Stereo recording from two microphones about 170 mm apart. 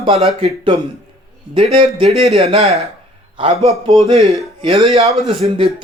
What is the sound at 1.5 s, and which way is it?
Speech, 30° right (ahead or behind).